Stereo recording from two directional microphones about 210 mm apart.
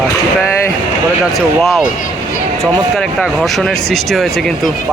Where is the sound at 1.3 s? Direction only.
Centre (ahead or behind).